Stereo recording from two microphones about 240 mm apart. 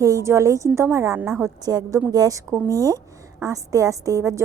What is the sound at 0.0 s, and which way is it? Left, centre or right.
A woman's voice, centre.